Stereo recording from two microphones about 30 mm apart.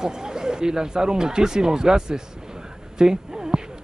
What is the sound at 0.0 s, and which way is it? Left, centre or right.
A woman's voice, right.